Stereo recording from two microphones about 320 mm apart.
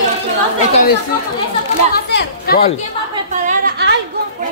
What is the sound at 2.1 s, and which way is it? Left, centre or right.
Speech, left.